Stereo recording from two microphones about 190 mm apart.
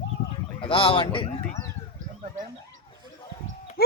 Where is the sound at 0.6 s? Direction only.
30° left (ahead or behind).